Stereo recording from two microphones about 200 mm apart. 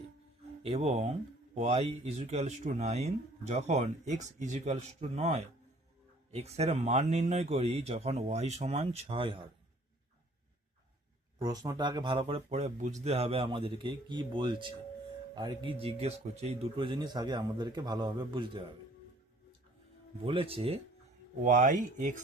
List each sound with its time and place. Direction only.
0.6 s speech: 30° right (ahead or behind)
11.3 s speech: 20° right (ahead or behind)
20.2 s speech: 25° right (ahead or behind)
21.4 s speech: 40° right (ahead or behind)